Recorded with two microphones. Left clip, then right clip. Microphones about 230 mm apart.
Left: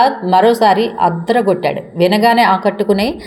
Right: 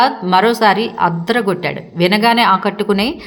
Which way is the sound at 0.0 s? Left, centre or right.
Centre.